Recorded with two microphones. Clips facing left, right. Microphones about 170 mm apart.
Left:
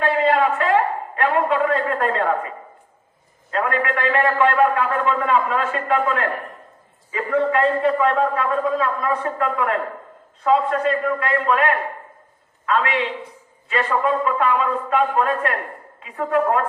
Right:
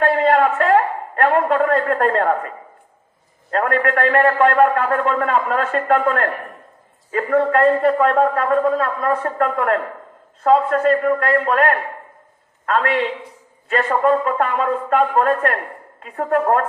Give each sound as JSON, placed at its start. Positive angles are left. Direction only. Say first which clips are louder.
{"t": 0.0, "sound": "a man's voice", "louder": "right 3 dB", "side_deg": -50}
{"t": 3.5, "sound": "a man's voice", "louder": "right 3 dB", "side_deg": -50}